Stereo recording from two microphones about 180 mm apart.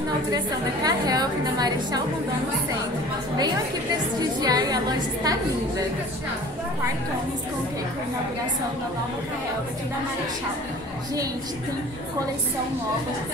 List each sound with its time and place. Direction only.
0.8 s a woman's voice: 20° right (ahead or behind)
4.4 s a woman's voice: 20° right (ahead or behind)